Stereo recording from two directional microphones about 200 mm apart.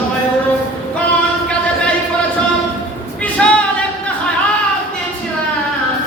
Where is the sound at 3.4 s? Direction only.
5° left (ahead or behind).